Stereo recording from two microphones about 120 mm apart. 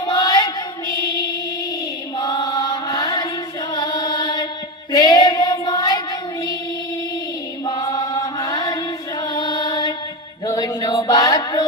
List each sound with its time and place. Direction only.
0.0 s female singing: 35° left (ahead or behind)
2.1 s chant: 35° left (ahead or behind)
3.7 s carnatic music: 35° left (ahead or behind)
4.9 s child singing: 30° left (ahead or behind)
7.6 s chant: 30° left (ahead or behind)
10.4 s a sound: 30° left (ahead or behind)